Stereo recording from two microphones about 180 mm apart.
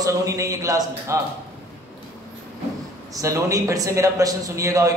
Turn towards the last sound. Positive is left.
turn(degrees=-20)  # may be behind; listen again after turning